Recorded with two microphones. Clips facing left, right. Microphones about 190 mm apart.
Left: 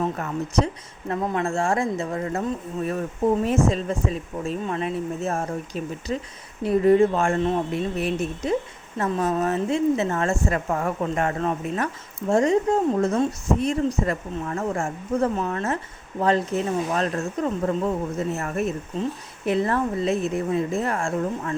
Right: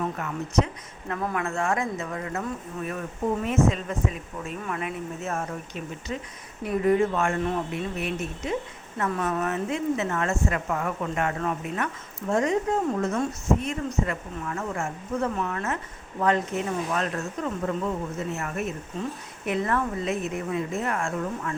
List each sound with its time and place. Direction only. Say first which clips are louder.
0.0 s a woman's voice: left 4 dB; 35° left (ahead or behind)